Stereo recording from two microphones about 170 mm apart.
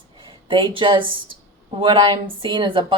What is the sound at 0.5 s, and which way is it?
Speech, 30° right (ahead or behind).